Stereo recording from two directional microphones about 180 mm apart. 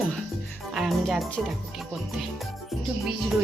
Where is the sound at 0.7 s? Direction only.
Centre (ahead or behind).